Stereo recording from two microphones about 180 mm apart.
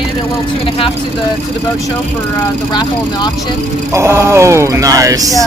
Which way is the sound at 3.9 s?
15° right (ahead or behind).